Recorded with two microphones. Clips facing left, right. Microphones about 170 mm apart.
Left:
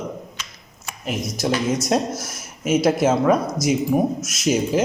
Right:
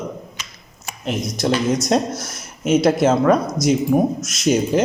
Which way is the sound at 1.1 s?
5° left (ahead or behind).